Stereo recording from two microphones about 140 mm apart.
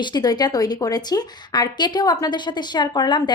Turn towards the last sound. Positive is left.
turn(degrees=30)  # may be behind; listen again after turning